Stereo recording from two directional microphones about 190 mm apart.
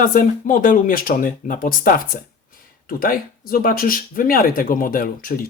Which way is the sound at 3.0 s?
50° left (ahead or behind).